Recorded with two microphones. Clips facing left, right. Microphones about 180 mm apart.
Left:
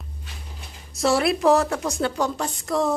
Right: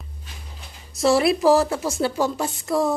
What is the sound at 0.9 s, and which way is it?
A woman's voice, centre (ahead or behind).